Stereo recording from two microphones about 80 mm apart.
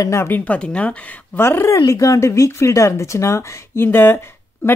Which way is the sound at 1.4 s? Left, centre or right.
Left.